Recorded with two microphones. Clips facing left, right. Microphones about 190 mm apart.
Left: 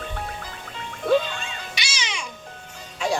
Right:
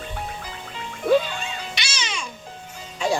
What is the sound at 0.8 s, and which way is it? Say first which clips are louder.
Music: right 1 dB; 5° right (ahead or behind).